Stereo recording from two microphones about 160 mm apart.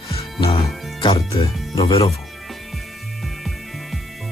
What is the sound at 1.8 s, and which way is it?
Speech, 35° left (ahead or behind).